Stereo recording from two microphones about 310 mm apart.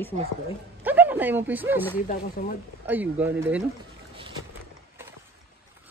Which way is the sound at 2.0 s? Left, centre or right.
Left.